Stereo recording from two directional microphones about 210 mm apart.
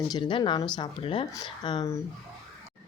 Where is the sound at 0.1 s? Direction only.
25° left (ahead or behind).